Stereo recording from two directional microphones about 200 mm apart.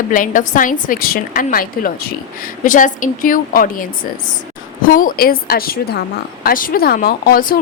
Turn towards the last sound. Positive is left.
turn(degrees=45)  # may be behind; listen again after turning